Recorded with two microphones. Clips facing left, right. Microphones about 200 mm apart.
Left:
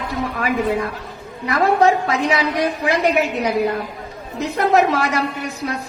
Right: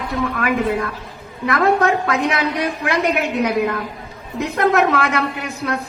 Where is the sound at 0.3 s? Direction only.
60° right (ahead or behind).